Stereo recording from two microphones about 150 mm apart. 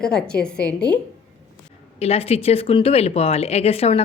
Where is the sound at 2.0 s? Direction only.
40° left (ahead or behind).